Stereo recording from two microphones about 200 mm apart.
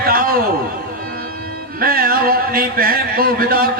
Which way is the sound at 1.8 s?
45° right (ahead or behind).